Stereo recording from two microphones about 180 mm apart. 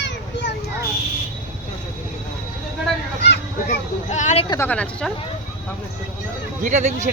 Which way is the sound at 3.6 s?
40° left (ahead or behind).